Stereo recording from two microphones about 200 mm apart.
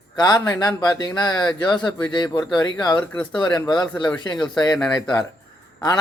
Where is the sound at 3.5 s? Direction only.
20° left (ahead or behind).